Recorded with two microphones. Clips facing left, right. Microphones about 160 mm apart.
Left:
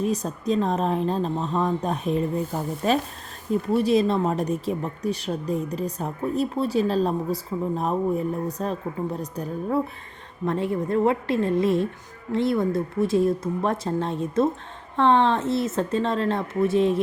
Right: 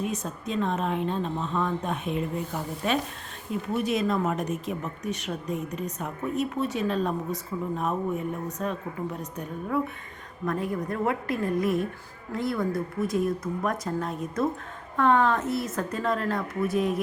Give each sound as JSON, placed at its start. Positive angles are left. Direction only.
{"t": 0.0, "sound": "a woman's voice", "side_deg": 35}